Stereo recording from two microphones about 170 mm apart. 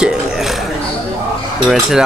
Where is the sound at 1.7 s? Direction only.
5° right (ahead or behind).